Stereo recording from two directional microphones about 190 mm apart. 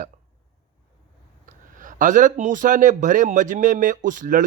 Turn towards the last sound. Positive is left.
turn(degrees=-45)  # may be behind; listen again after turning